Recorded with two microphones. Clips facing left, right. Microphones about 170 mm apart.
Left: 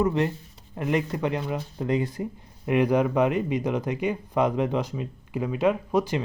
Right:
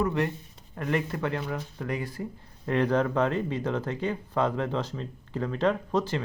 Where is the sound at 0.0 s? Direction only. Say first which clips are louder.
Left 3 dB; 20° left (ahead or behind).